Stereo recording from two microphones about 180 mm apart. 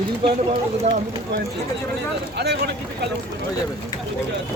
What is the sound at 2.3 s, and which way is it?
Speech, 65° right (ahead or behind).